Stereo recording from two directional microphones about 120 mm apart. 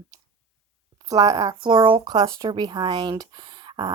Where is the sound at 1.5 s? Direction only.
40° right (ahead or behind).